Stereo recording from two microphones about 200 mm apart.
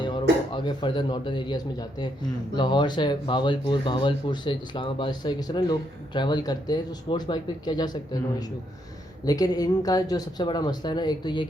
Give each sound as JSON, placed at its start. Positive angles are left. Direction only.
{"t": 0.0, "sound": "speech", "side_deg": 20}